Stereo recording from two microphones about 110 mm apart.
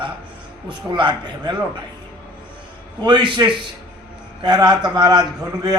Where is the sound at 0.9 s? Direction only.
45° right (ahead or behind).